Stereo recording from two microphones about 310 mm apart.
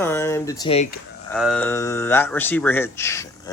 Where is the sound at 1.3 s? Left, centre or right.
Centre.